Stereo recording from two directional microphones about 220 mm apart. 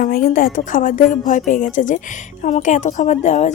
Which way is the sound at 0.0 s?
40° left (ahead or behind).